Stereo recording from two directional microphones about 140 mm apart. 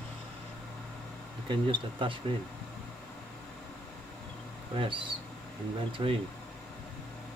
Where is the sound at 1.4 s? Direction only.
35° right (ahead or behind).